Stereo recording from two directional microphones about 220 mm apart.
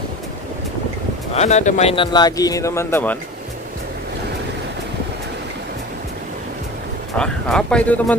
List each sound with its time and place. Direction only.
1.3 s speech: 30° left (ahead or behind); by 3.2 s 10° left (ahead or behind)
7.2 s speech: 5° left (ahead or behind)